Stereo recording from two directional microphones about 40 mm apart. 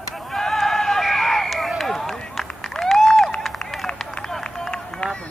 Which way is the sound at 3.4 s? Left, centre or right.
Centre.